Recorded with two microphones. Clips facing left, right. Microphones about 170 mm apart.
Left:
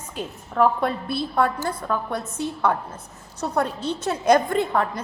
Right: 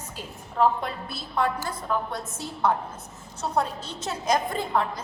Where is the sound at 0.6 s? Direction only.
90° left.